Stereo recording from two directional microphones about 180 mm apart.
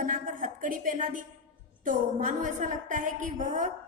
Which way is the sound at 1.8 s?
45° right (ahead or behind).